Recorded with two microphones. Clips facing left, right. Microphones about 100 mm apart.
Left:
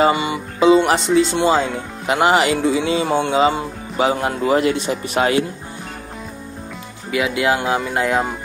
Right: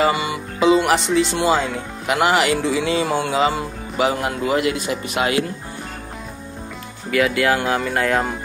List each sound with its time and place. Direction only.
0.0 s speech: 30° left (ahead or behind)
7.1 s speech: 15° left (ahead or behind)